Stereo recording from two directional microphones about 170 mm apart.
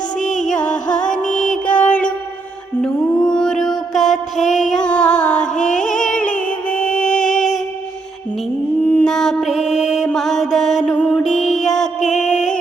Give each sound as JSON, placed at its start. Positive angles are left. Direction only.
{"t": 0.2, "sound": "music", "side_deg": 45}
{"t": 0.4, "sound": "music", "side_deg": 5}
{"t": 8.9, "sound": "mantra", "side_deg": 5}
{"t": 10.9, "sound": "music", "side_deg": 10}
{"t": 11.2, "sound": "mantra", "side_deg": 0}